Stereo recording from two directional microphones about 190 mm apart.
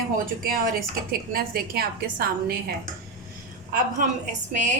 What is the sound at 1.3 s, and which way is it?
A woman's voice, 50° right (ahead or behind).